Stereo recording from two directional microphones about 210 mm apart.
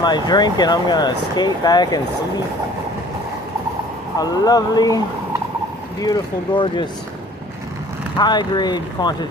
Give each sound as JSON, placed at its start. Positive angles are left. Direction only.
{"t": 0.0, "sound": "speech", "side_deg": 20}
{"t": 4.2, "sound": "speech", "side_deg": 20}
{"t": 8.2, "sound": "speech", "side_deg": 20}